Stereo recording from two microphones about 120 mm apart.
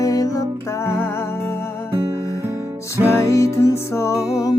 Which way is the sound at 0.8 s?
20° left (ahead or behind).